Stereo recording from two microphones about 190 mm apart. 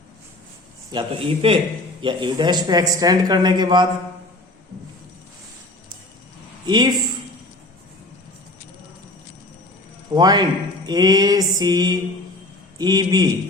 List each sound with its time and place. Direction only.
0.9 s speech: 25° right (ahead or behind)
6.7 s a man's voice: 20° right (ahead or behind)
10.2 s speech: 20° right (ahead or behind)